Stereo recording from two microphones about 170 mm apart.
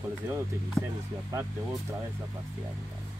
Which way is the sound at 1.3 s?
20° right (ahead or behind).